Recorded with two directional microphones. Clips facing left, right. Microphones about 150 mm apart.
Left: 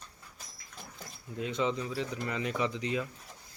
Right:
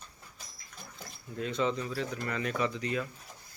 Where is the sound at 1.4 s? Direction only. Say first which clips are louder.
Right 1 dB; 15° left (ahead or behind).